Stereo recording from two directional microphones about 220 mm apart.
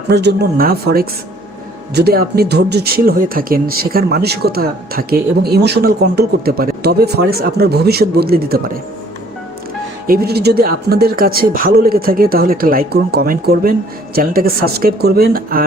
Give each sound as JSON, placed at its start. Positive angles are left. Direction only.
{"t": 0.1, "sound": "speech", "side_deg": -50}
{"t": 10.1, "sound": "speech", "side_deg": -45}